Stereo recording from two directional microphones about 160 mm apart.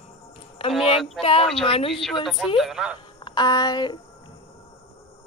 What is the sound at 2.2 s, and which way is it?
Speech, centre (ahead or behind).